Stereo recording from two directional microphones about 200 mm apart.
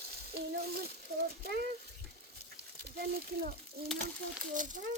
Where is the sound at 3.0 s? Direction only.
50° right (ahead or behind).